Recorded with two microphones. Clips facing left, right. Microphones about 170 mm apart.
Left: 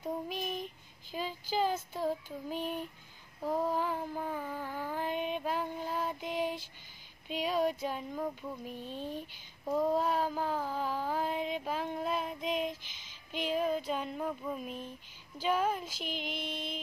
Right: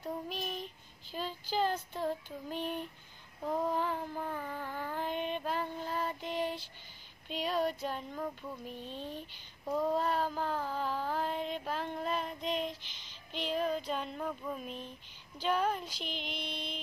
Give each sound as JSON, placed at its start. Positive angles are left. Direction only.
{"t": 0.0, "sound": "child singing", "side_deg": 10}
{"t": 1.1, "sound": "speech", "side_deg": 5}
{"t": 3.4, "sound": "a sound", "side_deg": 10}
{"t": 7.2, "sound": "speech", "side_deg": 10}
{"t": 9.7, "sound": "child singing", "side_deg": 10}
{"t": 12.9, "sound": "a sound", "side_deg": 10}
{"t": 15.4, "sound": "speech", "side_deg": 5}
{"t": 16.3, "sound": "music", "side_deg": 45}